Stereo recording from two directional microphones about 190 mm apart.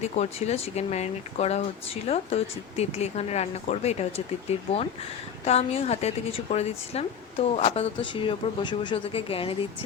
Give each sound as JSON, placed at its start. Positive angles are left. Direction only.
{"t": 0.0, "sound": "a woman's voice", "side_deg": 35}